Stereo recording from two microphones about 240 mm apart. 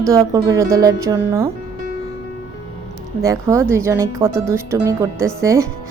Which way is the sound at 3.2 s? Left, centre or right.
Centre.